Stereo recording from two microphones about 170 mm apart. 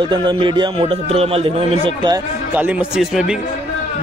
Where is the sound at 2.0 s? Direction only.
20° right (ahead or behind).